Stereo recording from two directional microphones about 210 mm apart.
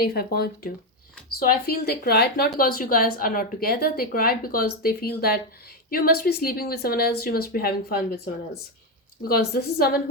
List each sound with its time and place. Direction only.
0.1 s a woman's voice: 45° left (ahead or behind)